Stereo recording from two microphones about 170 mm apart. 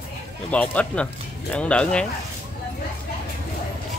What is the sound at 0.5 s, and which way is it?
Speech, 5° left (ahead or behind).